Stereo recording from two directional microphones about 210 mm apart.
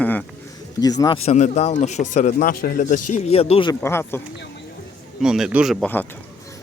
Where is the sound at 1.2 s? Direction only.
30° left (ahead or behind).